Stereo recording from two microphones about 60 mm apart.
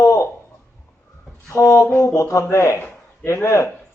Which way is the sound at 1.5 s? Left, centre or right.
Left.